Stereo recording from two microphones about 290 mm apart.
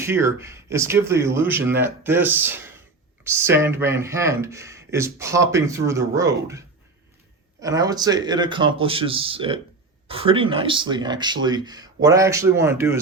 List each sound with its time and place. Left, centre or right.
0.0 s speech: centre